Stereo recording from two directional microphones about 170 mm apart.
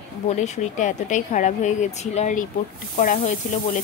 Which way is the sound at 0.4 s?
45° left (ahead or behind).